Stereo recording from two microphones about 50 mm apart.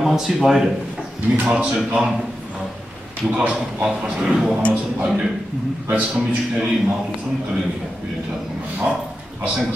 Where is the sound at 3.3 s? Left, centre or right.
Centre.